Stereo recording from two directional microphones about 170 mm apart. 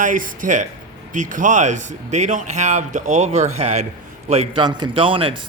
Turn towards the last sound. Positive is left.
turn(degrees=-30)  # may be behind; listen again after turning